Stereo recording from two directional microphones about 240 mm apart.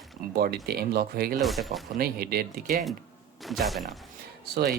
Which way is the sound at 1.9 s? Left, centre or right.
Right.